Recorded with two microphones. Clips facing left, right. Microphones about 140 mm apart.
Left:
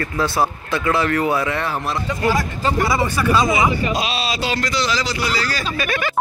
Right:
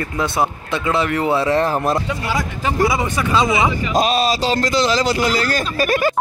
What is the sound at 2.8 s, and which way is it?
Speech, 15° right (ahead or behind).